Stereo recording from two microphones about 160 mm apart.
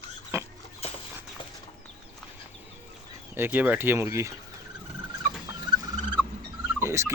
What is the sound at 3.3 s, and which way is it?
Speech, 10° right (ahead or behind).